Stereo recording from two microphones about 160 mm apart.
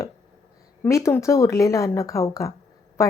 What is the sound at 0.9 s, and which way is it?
A woman's voice, 20° left (ahead or behind).